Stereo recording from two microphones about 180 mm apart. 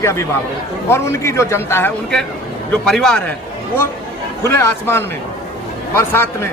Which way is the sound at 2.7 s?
5° left (ahead or behind).